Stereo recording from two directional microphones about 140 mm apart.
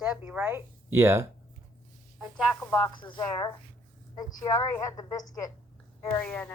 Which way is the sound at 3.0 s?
35° left (ahead or behind).